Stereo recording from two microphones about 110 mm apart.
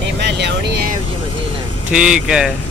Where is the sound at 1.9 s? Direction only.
10° right (ahead or behind).